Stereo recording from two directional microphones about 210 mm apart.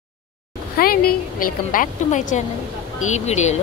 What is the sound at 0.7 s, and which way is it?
Speech, 45° left (ahead or behind).